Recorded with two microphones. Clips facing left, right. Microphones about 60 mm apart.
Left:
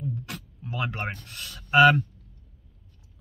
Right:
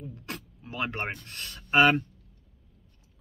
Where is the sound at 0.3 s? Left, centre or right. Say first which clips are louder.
Left 2 dB; right.